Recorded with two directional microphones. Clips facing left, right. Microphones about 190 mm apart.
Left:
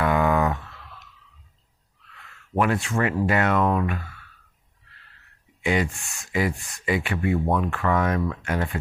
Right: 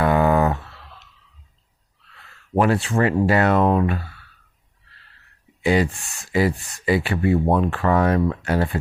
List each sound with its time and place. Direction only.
0.0 s a sound: 35° right (ahead or behind)
2.0 s speech: 35° right (ahead or behind)
5.6 s speech: 35° right (ahead or behind)